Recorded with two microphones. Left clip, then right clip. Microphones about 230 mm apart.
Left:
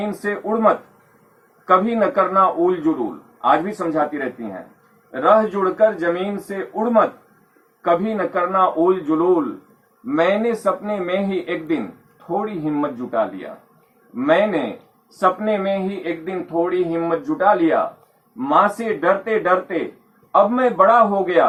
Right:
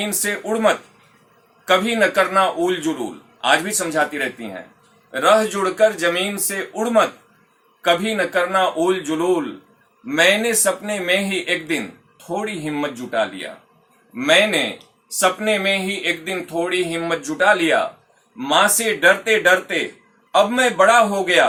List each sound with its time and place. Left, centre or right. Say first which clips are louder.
0.0 s speech: even; right
7.9 s speech: right 1 dB; right